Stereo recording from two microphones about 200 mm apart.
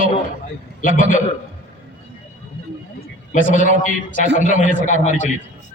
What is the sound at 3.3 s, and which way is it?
A man's voice, 40° left (ahead or behind).